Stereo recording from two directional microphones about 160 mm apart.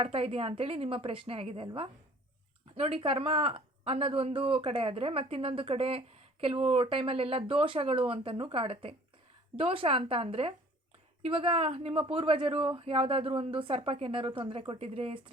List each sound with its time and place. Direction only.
0.0 s speech: 35° right (ahead or behind)